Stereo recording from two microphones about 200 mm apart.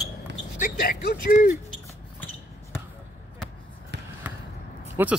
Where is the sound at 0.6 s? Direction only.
45° left (ahead or behind).